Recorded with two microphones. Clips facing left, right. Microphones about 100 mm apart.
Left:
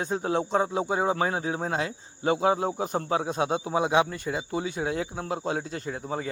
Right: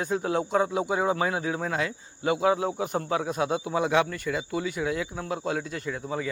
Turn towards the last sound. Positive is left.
turn(degrees=35)  # may be behind; listen again after turning